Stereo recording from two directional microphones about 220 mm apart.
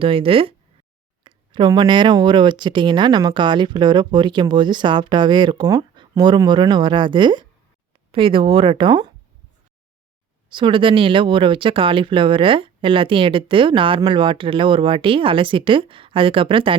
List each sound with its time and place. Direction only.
0.0 s speech: 25° right (ahead or behind)
10.5 s speech: 20° right (ahead or behind)